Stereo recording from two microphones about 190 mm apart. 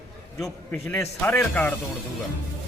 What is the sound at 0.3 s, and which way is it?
A man's voice, 5° left (ahead or behind).